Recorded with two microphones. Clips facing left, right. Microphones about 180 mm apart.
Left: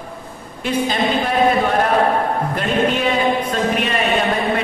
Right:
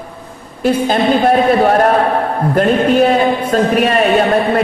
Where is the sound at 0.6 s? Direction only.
45° right (ahead or behind).